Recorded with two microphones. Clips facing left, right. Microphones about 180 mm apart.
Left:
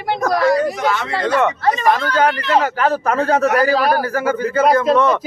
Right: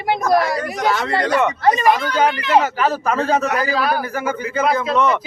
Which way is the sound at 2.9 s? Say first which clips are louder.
Left 2 dB; 15° left (ahead or behind).